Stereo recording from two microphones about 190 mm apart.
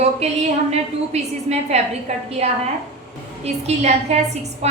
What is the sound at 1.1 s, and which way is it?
A woman's voice, 35° right (ahead or behind).